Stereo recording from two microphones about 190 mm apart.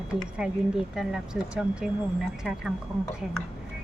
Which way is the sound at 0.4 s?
5° right (ahead or behind).